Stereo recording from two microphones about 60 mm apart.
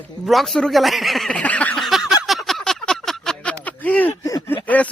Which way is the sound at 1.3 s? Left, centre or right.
Left.